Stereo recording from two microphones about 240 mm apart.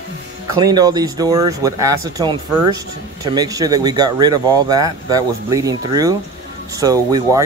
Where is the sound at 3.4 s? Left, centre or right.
Centre.